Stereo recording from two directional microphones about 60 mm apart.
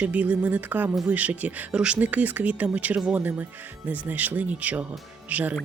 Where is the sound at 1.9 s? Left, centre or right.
Right.